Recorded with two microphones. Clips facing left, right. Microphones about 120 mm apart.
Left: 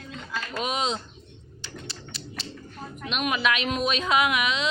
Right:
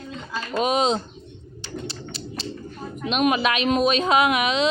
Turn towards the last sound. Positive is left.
turn(degrees=-30)  # may be behind; listen again after turning